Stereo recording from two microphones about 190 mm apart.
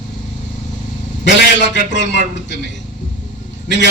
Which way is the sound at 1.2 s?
65° left (ahead or behind).